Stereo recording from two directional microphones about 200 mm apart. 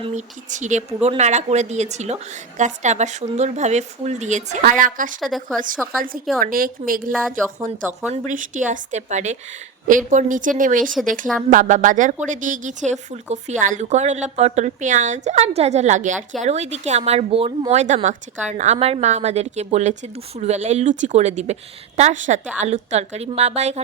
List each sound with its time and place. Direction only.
0.0 s speech: 35° right (ahead or behind)
5.2 s a woman's voice: centre (ahead or behind)
5.5 s a woman's voice: 45° right (ahead or behind)
7.1 s a woman's voice: centre (ahead or behind)
7.6 s speech: 15° right (ahead or behind)
8.1 s speech: 40° right (ahead or behind)